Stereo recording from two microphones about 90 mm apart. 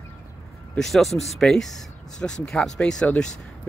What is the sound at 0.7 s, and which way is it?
Speech, 5° left (ahead or behind).